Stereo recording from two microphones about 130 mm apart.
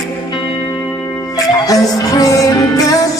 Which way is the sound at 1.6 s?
30° left (ahead or behind).